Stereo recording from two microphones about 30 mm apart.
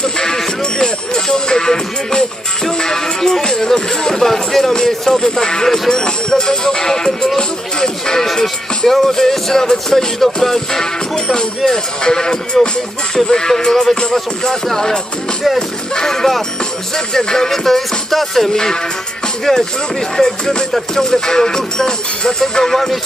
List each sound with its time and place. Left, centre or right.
0.0 s music: centre
8.8 s music: centre
10.7 s music: centre
17.5 s music: centre
18.5 s music: centre